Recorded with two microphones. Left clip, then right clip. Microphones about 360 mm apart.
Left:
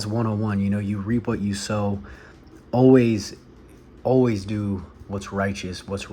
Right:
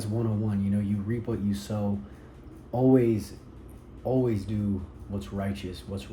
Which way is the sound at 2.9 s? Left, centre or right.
Left.